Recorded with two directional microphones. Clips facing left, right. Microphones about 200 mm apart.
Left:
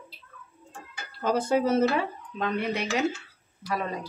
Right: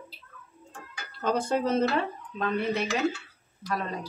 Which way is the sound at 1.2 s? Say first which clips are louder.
Left 2 dB; 5° left (ahead or behind).